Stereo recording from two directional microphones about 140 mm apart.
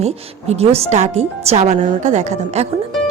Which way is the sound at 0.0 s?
50° right (ahead or behind).